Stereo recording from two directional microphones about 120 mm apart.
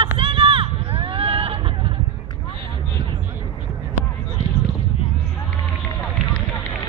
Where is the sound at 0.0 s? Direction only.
50° right (ahead or behind).